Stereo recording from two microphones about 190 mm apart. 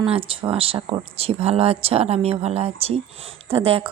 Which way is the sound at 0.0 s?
30° right (ahead or behind).